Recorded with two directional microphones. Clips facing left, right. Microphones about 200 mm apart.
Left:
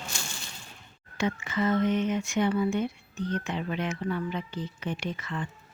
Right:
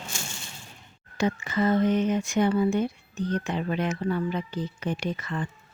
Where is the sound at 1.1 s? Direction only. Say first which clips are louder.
Right 3 dB; 35° right (ahead or behind).